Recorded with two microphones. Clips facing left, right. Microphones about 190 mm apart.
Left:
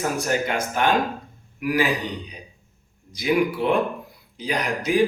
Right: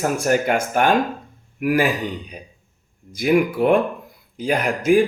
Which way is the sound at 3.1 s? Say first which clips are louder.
Right 4 dB; 50° right (ahead or behind).